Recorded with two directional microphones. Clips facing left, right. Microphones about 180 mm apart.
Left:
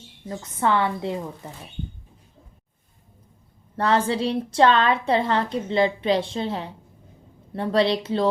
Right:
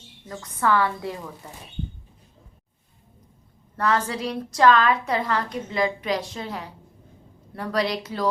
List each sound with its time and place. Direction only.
0.3 s a woman's voice: 25° left (ahead or behind)
3.8 s a woman's voice: 30° left (ahead or behind)